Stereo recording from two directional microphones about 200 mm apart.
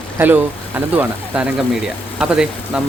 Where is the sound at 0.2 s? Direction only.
10° right (ahead or behind).